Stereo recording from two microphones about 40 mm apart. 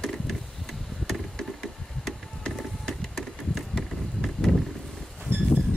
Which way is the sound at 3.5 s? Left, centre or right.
Centre.